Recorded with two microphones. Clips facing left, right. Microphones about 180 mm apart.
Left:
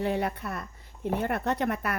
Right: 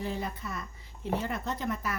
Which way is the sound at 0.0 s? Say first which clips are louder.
Left 6 dB; 65° left (ahead or behind).